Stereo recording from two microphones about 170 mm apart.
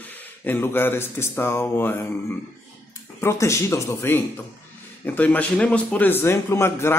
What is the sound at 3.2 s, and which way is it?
Speech, 15° left (ahead or behind).